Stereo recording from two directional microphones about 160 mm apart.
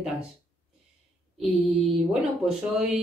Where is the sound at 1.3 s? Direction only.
Centre (ahead or behind).